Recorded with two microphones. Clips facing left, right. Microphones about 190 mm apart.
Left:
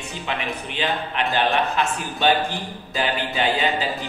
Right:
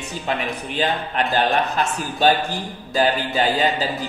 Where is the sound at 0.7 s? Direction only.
40° right (ahead or behind).